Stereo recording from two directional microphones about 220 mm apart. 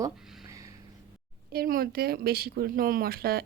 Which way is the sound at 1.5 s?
40° right (ahead or behind).